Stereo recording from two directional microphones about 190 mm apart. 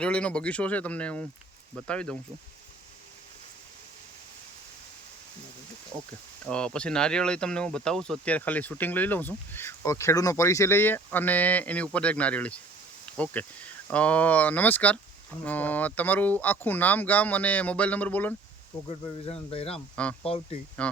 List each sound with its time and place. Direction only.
0.0 s speech: 5° left (ahead or behind)
6.5 s speech: 5° left (ahead or behind)
18.9 s speech: 30° left (ahead or behind)
20.8 s speech: 5° left (ahead or behind)